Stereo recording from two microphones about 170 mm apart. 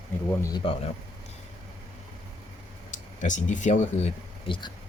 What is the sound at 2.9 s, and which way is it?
Speech, 45° left (ahead or behind).